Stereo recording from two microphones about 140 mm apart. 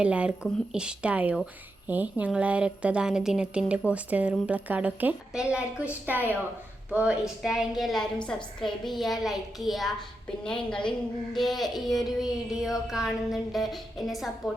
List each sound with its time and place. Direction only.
0.0 s a woman's voice: 10° right (ahead or behind)
6.9 s music: 10° right (ahead or behind)